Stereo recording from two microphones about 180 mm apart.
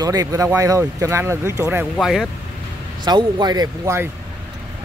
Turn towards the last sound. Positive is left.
turn(degrees=-15)  # may be behind; listen again after turning